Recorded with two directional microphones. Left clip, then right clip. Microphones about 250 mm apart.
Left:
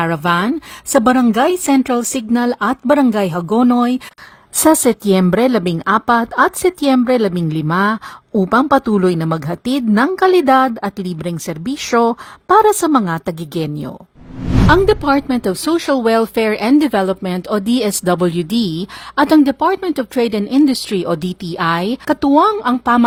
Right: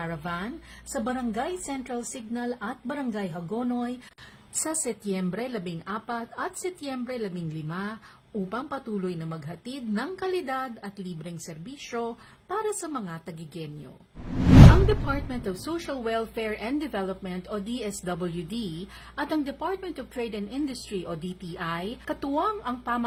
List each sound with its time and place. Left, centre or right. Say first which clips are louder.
0.0 s a woman's voice: left 18 dB; left
15.0 s speech: left 16 dB; left